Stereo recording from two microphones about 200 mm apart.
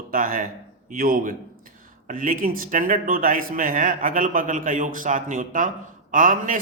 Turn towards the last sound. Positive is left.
turn(degrees=-40)  # may be behind; listen again after turning